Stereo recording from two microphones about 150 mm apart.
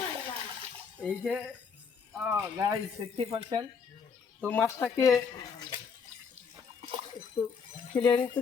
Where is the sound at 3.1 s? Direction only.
40° right (ahead or behind).